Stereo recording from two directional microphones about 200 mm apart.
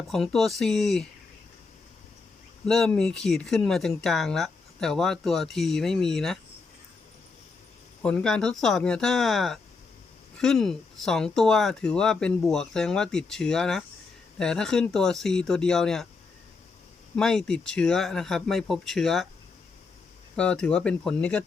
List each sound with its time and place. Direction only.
0.1 s speech: centre (ahead or behind)
2.6 s speech: 5° left (ahead or behind)
8.0 s speech: 5° left (ahead or behind)
17.2 s speech: 5° left (ahead or behind)
20.3 s speech: 5° left (ahead or behind)